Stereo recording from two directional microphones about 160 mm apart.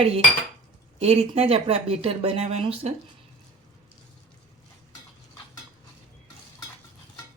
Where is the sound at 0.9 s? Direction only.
40° right (ahead or behind).